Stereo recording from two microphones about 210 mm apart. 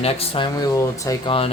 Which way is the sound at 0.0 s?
30° left (ahead or behind).